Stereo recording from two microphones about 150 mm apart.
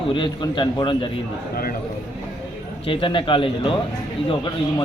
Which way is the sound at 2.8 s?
35° left (ahead or behind).